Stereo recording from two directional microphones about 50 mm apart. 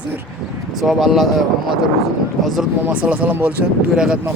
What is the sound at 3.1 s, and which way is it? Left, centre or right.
Speech, right.